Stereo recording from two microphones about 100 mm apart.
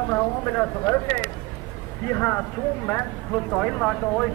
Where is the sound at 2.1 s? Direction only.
20° left (ahead or behind).